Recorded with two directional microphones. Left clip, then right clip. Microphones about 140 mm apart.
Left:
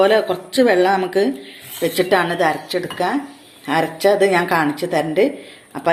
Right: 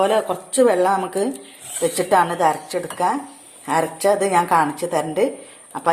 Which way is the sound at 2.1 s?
65° right (ahead or behind).